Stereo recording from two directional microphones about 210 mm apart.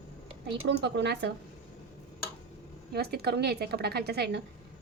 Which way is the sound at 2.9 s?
50° right (ahead or behind).